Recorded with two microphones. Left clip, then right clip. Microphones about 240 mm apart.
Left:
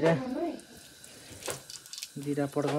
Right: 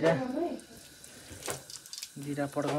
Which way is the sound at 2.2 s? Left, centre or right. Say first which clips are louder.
Left 3 dB; left.